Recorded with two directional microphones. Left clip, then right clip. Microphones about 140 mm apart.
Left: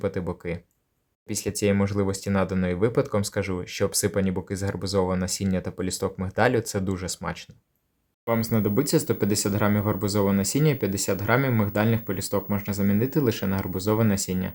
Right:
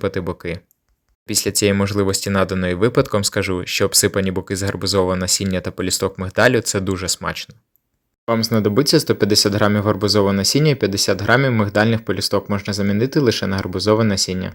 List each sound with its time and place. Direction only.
0.0 s speech: 25° right (ahead or behind)